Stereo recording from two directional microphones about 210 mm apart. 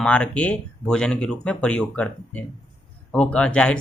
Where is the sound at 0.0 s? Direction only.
5° left (ahead or behind).